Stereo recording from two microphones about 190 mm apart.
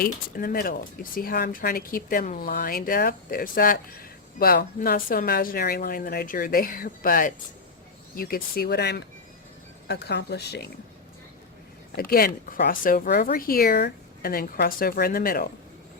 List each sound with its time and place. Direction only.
0.0 s a woman's voice: 50° left (ahead or behind)
11.9 s speech: 50° left (ahead or behind)